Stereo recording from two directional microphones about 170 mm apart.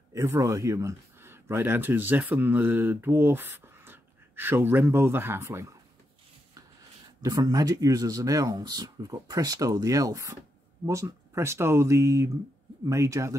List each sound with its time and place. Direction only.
0.1 s speech: 20° right (ahead or behind)
7.2 s speech: 20° right (ahead or behind)